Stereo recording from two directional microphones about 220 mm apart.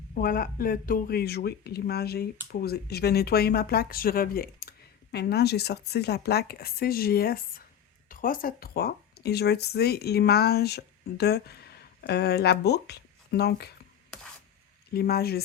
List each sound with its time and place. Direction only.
0.1 s speech: 40° left (ahead or behind)
14.9 s speech: 45° left (ahead or behind)